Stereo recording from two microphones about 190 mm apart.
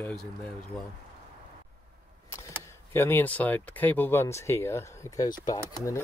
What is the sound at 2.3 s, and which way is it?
Speech, 15° left (ahead or behind).